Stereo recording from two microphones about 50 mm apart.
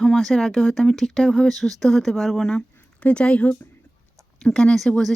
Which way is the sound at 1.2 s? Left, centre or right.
Centre.